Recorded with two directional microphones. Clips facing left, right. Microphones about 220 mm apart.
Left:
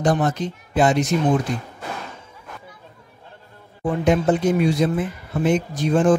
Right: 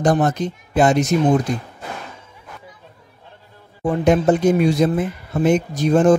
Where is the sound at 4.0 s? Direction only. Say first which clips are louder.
Right 3 dB; 45° right (ahead or behind).